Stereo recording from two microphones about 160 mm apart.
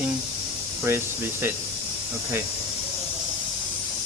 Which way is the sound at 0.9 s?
15° right (ahead or behind).